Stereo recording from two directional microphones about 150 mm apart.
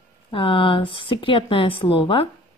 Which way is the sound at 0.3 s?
35° left (ahead or behind).